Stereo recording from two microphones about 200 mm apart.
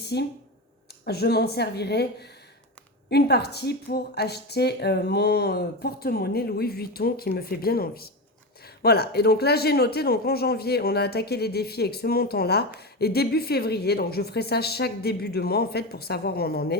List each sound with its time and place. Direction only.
0.1 s speech: 55° left (ahead or behind)